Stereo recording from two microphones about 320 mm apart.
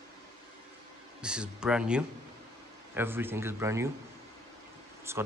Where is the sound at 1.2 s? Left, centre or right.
Centre.